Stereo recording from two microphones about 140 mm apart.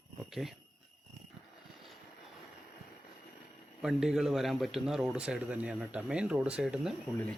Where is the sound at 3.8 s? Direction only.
5° right (ahead or behind).